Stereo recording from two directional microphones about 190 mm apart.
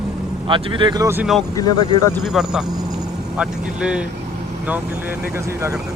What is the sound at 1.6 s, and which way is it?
Speech, 15° left (ahead or behind).